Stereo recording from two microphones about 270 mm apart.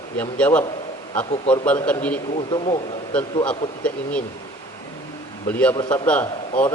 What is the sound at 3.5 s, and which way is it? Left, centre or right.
Speech, centre.